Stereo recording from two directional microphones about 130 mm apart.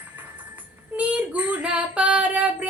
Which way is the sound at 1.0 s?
10° right (ahead or behind).